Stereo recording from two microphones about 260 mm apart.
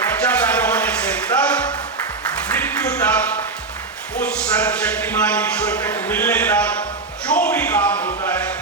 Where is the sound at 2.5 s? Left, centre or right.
Centre.